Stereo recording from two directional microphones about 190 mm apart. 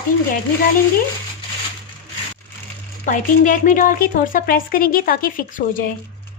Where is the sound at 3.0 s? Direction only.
45° left (ahead or behind).